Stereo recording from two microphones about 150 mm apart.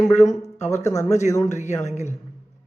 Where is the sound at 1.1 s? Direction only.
50° left (ahead or behind).